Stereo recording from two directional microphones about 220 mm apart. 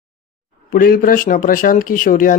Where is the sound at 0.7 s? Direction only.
40° left (ahead or behind).